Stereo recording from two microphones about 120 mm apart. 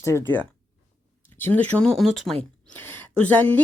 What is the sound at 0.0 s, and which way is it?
Speech, 25° left (ahead or behind).